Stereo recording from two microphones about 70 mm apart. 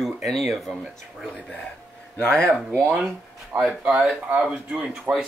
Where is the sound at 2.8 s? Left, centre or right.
Centre.